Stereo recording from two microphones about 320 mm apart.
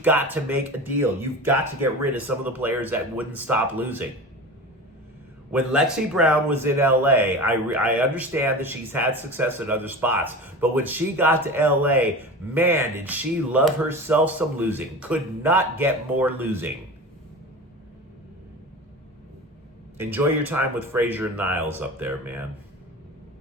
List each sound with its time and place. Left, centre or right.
0.0 s speech: centre
5.5 s speech: centre
20.0 s speech: centre